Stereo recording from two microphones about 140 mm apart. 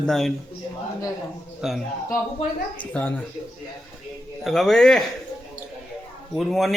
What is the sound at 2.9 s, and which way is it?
Speech, 10° left (ahead or behind).